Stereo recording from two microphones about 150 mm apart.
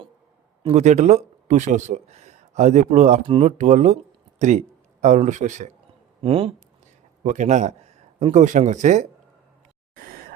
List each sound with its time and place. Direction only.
0.6 s a man's voice: 45° right (ahead or behind)
6.2 s speech: 40° right (ahead or behind)
7.3 s a man's voice: 55° right (ahead or behind)